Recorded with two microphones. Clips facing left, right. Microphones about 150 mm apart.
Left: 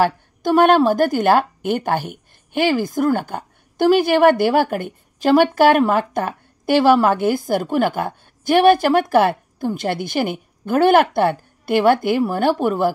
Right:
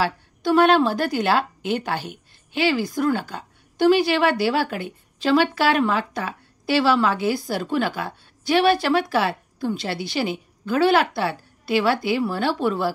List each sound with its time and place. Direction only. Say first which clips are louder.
0.0 s speech: left 5 dB; 50° left (ahead or behind)